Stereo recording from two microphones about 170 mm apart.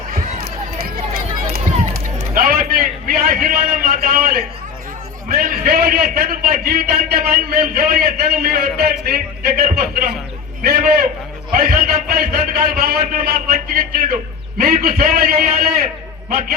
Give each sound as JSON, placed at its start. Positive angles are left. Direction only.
{"t": 0.8, "sound": "run", "side_deg": -60}
{"t": 2.1, "sound": "a sound", "side_deg": -60}
{"t": 5.3, "sound": "a man's voice", "side_deg": -55}